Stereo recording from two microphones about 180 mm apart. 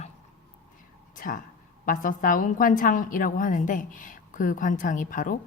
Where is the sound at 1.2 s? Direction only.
50° left (ahead or behind).